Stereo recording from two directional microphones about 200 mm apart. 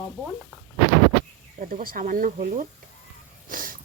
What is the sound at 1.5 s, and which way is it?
Speech, 45° right (ahead or behind).